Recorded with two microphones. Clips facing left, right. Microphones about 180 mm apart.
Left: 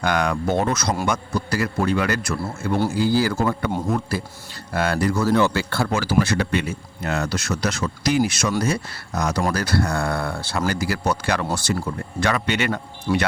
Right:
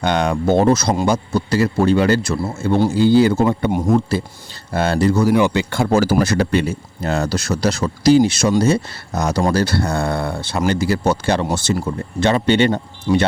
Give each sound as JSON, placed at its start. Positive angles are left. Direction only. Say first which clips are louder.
{"t": 0.0, "sound": "speech", "louder": "right 4 dB", "side_deg": -25}
{"t": 4.7, "sound": "speech", "louder": "right 5 dB", "side_deg": -25}
{"t": 5.9, "sound": "speech", "louder": "right 6 dB", "side_deg": -40}